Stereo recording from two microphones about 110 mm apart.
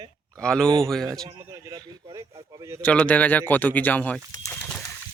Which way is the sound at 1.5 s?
30° right (ahead or behind).